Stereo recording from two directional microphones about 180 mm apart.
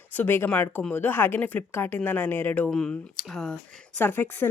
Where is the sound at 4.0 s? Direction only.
10° left (ahead or behind).